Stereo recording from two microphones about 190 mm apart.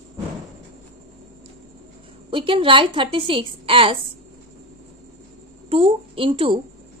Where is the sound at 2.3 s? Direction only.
25° right (ahead or behind).